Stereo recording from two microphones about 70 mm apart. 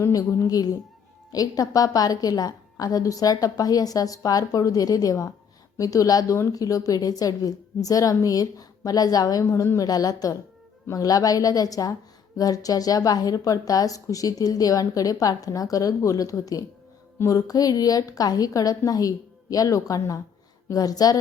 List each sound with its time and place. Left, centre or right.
0.0 s speech: left
0.4 s a woman's voice: left